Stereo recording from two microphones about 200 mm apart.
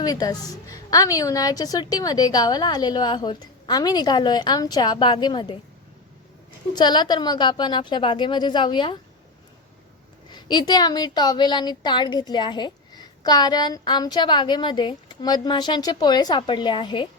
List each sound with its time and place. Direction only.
0.0 s speech: 20° left (ahead or behind)
6.7 s speech: 20° left (ahead or behind)
10.2 s speech: 20° left (ahead or behind)